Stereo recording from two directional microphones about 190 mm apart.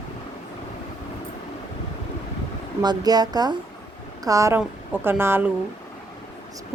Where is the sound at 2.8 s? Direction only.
20° right (ahead or behind).